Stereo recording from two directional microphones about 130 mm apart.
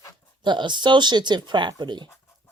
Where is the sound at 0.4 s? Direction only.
35° right (ahead or behind).